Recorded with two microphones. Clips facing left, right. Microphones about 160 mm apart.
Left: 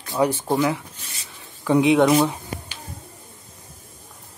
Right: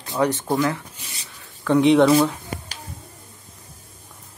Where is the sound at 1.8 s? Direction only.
5° left (ahead or behind).